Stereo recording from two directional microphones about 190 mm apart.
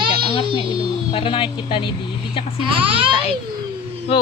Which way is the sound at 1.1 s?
25° left (ahead or behind).